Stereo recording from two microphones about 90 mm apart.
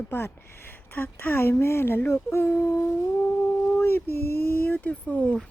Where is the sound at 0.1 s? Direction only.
25° left (ahead or behind).